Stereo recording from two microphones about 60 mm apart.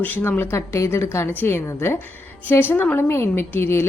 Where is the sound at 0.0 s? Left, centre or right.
Left.